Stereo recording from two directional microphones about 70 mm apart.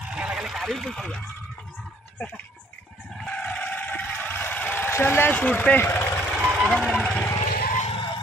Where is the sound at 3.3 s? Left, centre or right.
Centre.